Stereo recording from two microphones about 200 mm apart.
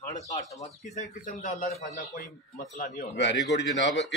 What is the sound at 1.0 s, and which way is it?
A man's voice, 35° left (ahead or behind).